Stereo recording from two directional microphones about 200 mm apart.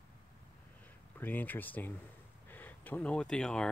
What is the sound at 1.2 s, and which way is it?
Speech, 10° left (ahead or behind).